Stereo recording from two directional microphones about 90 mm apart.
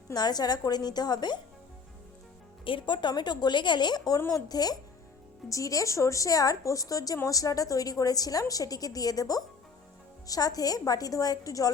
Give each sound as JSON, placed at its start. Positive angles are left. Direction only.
{"t": 0.1, "sound": "a woman's voice", "side_deg": 50}
{"t": 2.6, "sound": "a woman's voice", "side_deg": 65}